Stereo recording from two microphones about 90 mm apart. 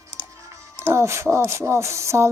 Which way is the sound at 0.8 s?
30° right (ahead or behind).